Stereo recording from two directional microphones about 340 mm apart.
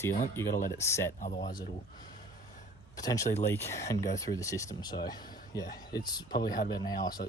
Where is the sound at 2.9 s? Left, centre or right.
Centre.